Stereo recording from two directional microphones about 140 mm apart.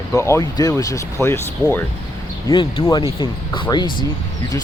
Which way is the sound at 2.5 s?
35° left (ahead or behind).